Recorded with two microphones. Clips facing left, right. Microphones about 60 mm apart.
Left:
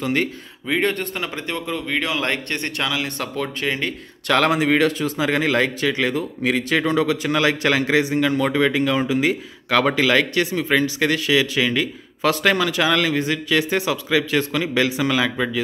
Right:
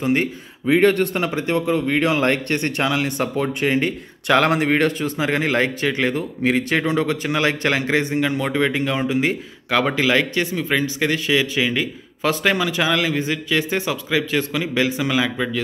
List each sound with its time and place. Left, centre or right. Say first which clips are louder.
0.0 s speech: right 2 dB; right
0.7 s a man's voice: right 6 dB; right
4.3 s speech: right 2 dB; centre
4.8 s a man's voice: even; centre
5.2 s speech: even; centre
6.8 s a man's voice: left 1 dB; centre